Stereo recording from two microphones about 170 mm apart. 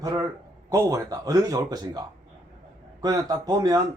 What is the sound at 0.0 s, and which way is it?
A man's voice, 20° right (ahead or behind).